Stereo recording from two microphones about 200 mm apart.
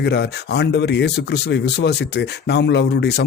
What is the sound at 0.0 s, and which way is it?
Speech, 55° left (ahead or behind).